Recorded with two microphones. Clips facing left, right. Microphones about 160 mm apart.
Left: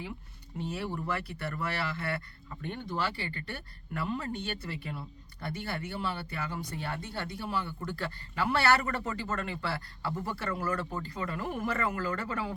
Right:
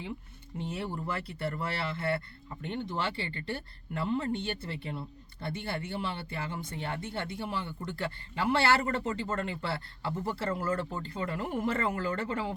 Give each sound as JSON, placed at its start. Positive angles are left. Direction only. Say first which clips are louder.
{"t": 0.6, "sound": "speech", "louder": "left 1 dB", "side_deg": -25}